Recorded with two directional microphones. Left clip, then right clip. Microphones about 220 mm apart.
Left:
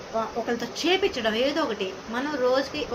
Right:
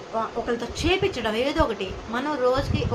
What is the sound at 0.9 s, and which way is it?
A woman's voice, 15° right (ahead or behind).